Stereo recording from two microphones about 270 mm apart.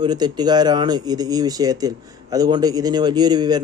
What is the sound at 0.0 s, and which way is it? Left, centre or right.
A man's voice, centre.